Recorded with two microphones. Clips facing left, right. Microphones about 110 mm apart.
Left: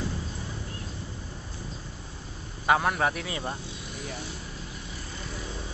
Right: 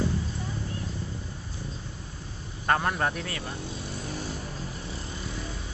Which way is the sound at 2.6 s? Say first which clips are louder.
Left 2 dB; 5° left (ahead or behind).